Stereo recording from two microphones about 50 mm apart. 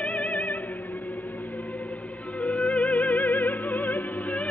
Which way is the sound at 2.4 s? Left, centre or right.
Left.